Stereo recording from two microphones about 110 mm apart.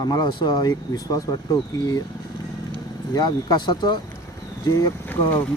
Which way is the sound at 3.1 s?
40° left (ahead or behind).